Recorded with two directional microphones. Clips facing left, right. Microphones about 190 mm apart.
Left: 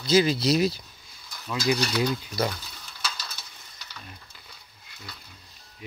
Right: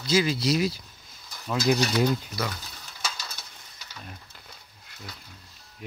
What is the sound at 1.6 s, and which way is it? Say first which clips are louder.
Mechanisms: right 2 dB; 50° right (ahead or behind).